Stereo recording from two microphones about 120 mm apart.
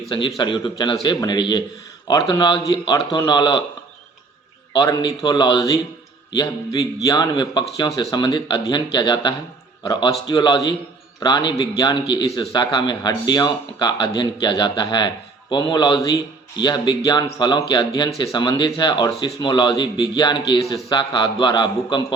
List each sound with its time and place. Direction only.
0.3 s a man's voice: 35° left (ahead or behind)
4.7 s a man's voice: 35° left (ahead or behind)